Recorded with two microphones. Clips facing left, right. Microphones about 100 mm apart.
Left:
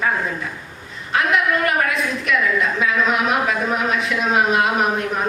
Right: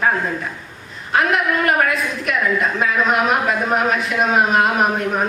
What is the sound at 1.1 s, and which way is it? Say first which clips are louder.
A man's voice: right 1 dB; 50° right (ahead or behind).